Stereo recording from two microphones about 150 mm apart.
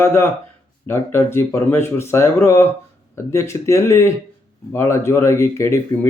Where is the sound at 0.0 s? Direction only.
15° left (ahead or behind).